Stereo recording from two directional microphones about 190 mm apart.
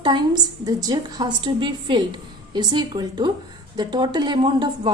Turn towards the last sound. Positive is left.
turn(degrees=-25)  # may be behind; listen again after turning